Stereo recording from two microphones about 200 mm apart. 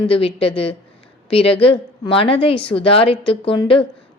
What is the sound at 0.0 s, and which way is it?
A woman's voice, 25° left (ahead or behind).